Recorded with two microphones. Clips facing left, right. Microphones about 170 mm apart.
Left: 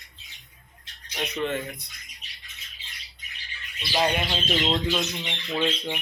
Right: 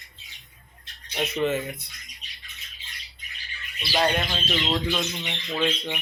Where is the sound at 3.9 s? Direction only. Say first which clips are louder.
Right 1 dB; 5° left (ahead or behind).